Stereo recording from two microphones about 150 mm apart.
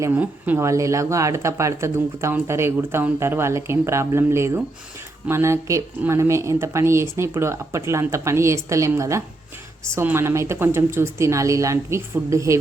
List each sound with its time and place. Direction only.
0.0 s speech: 10° right (ahead or behind)